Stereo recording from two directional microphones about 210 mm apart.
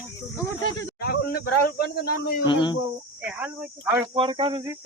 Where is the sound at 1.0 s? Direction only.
45° left (ahead or behind).